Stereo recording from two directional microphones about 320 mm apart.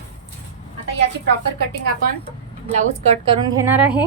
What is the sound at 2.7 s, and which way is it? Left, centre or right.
Speech, right.